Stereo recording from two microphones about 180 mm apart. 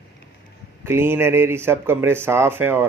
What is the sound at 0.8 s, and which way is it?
Speech, 15° right (ahead or behind).